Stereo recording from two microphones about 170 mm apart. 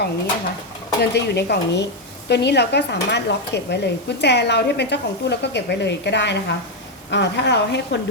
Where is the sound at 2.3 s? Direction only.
80° left.